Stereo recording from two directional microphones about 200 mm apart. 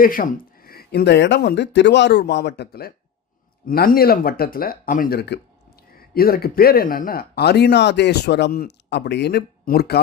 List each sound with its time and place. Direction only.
0.0 s speech: 45° left (ahead or behind)